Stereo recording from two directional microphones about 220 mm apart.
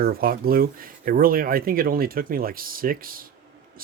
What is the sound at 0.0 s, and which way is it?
Speech, 40° right (ahead or behind).